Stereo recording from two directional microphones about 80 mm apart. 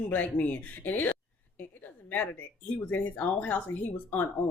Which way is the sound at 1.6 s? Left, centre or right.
Left.